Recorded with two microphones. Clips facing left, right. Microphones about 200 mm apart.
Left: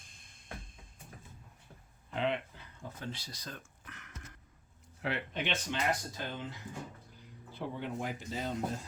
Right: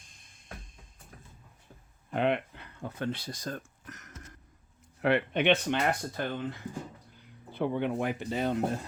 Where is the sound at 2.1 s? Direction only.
60° right (ahead or behind); by 4.1 s 40° right (ahead or behind).